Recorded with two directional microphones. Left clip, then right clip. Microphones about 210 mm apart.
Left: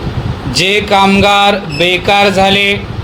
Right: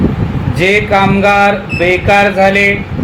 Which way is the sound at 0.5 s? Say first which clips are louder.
Even; 35° left (ahead or behind).